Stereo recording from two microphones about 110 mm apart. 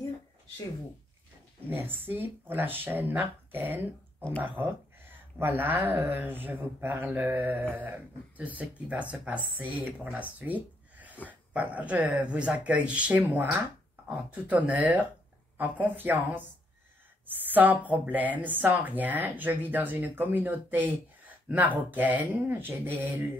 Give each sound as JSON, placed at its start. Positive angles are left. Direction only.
{"t": 1.7, "sound": "speech", "side_deg": -20}
{"t": 10.4, "sound": "a sound", "side_deg": -15}
{"t": 11.2, "sound": "speech", "side_deg": -15}